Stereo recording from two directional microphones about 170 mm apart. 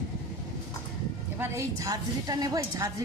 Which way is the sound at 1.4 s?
15° right (ahead or behind).